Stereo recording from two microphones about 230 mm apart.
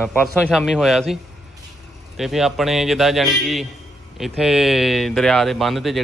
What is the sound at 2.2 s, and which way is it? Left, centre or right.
A man's voice, centre.